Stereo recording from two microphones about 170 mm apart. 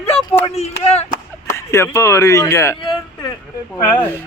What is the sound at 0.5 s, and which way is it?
Speech, 40° left (ahead or behind).